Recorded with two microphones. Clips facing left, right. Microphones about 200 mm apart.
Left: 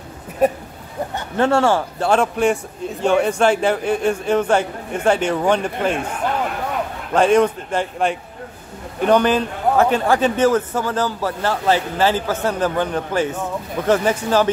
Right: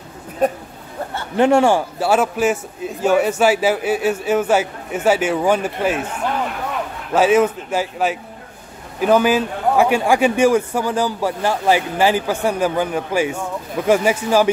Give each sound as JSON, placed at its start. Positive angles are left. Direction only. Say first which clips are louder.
{"t": 0.4, "sound": "speech", "louder": "left 1 dB", "side_deg": 10}
{"t": 1.3, "sound": "a man's voice", "louder": "right 3 dB", "side_deg": -15}
{"t": 7.2, "sound": "a man's voice", "louder": "even", "side_deg": -5}